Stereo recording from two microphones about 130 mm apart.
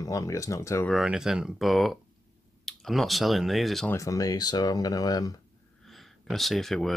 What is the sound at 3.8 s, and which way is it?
Speech, 25° left (ahead or behind).